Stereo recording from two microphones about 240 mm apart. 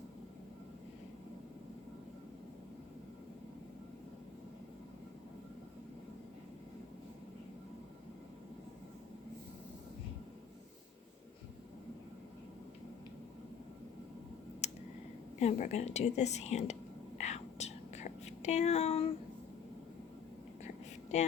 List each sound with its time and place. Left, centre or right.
14.6 s a sound: left
15.4 s a woman's voice: left
17.2 s whispering: left